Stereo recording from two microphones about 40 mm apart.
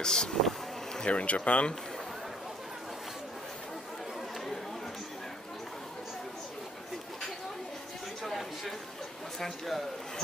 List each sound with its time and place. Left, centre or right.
0.0 s speech: centre
0.4 s vehicle: centre
1.0 s speech: left
8.3 s a sound: centre
9.4 s speech: centre